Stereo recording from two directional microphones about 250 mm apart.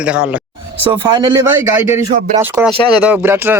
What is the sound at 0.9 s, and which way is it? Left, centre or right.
Speech, centre.